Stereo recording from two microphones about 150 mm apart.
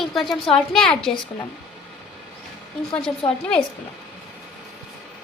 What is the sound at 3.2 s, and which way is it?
Speech, 35° left (ahead or behind).